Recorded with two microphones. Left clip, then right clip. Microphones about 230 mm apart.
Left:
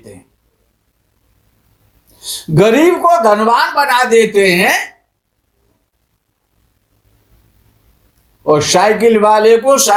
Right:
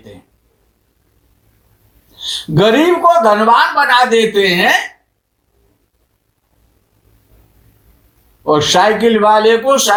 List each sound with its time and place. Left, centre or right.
2.1 s speech: left
8.4 s speech: left